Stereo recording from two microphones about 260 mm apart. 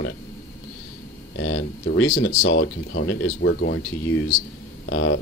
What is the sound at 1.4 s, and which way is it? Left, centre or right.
Speech, left.